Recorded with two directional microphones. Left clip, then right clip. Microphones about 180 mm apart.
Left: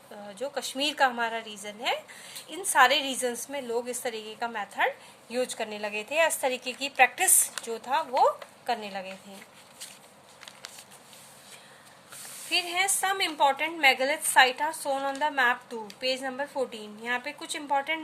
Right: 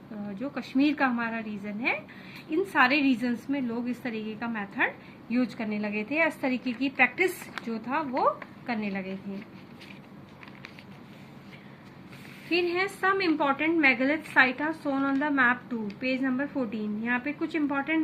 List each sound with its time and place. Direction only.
0.3 s a woman's voice: 65° left (ahead or behind)
12.5 s a woman's voice: 70° left (ahead or behind)